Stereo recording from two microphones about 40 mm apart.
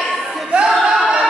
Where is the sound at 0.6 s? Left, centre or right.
Centre.